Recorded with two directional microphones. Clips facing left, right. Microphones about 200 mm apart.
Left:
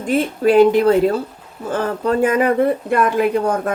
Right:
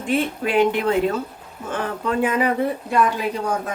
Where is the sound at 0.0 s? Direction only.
40° left (ahead or behind).